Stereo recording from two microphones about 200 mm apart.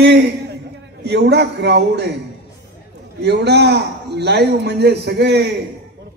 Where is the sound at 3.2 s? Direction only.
55° right (ahead or behind).